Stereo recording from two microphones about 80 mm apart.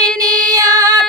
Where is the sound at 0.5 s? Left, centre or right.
Right.